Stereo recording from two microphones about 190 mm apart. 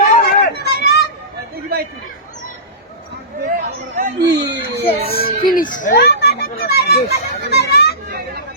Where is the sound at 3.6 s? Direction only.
40° right (ahead or behind).